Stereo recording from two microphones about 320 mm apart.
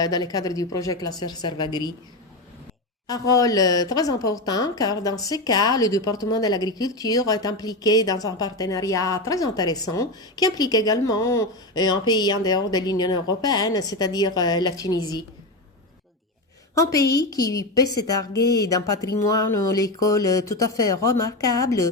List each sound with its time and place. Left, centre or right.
0.0 s a woman's voice: centre
3.1 s a woman's voice: centre
16.7 s a woman's voice: centre
20.6 s speech: left
21.2 s a woman's voice: centre